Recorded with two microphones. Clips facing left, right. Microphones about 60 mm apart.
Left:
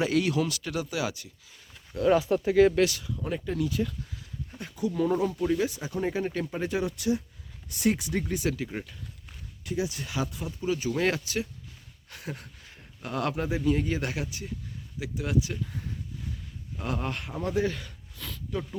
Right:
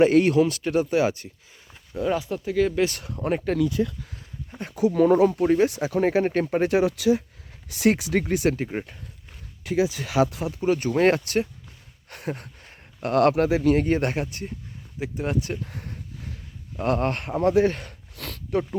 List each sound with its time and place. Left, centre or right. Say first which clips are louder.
0.0 s speech: right 9 dB; right
1.9 s speech: left 1 dB; right
2.4 s speech: left 1 dB; centre
2.9 s speech: right 6 dB; right
4.7 s speech: right 8 dB; right
5.6 s speech: right 8 dB; right
7.7 s speech: right 6 dB; right
8.3 s speech: right 7 dB; right
8.5 s speech: right 5 dB; right
9.6 s speech: right 8 dB; right
10.7 s speech: right 7 dB; right
13.8 s speech: right 7 dB; right
17.4 s speech: right 9 dB; right
17.7 s speech: right 5 dB; right